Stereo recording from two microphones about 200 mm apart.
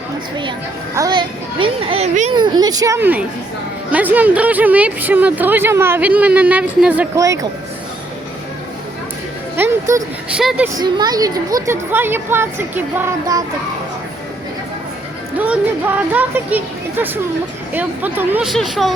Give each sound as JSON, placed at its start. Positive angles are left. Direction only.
{"t": 0.9, "sound": "a child's voice", "side_deg": -20}
{"t": 2.3, "sound": "speech", "side_deg": -20}
{"t": 9.6, "sound": "a sound", "side_deg": -10}
{"t": 10.3, "sound": "speech", "side_deg": -5}
{"t": 10.8, "sound": "speech", "side_deg": -20}
{"t": 16.1, "sound": "speech", "side_deg": -10}